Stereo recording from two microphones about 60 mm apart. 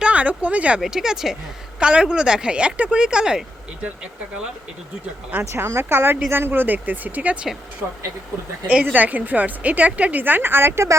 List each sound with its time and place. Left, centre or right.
0.0 s speech: right
0.8 s speech: centre
5.4 s a woman's voice: right
8.8 s a woman's voice: right